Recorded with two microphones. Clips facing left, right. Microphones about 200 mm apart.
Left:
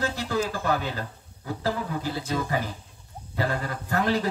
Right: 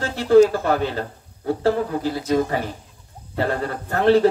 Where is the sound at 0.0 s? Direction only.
45° right (ahead or behind).